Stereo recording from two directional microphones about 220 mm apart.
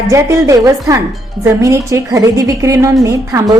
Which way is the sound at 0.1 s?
15° right (ahead or behind).